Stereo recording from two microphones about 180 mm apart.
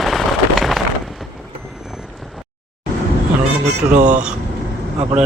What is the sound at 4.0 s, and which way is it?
Speech, 40° right (ahead or behind).